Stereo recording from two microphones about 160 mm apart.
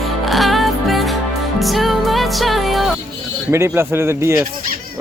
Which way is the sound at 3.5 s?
15° right (ahead or behind).